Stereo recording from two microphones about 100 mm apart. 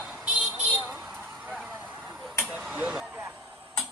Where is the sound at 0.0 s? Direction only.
5° right (ahead or behind).